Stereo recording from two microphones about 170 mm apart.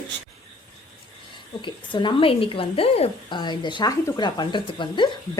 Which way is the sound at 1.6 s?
30° left (ahead or behind).